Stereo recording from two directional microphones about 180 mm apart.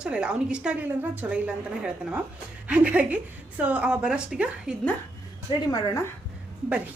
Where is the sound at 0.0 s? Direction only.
5° right (ahead or behind).